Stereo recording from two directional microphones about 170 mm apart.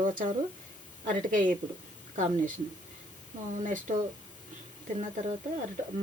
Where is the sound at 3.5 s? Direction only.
45° right (ahead or behind).